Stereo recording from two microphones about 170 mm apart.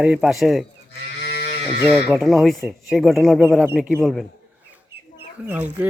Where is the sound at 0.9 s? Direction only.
75° left (ahead or behind).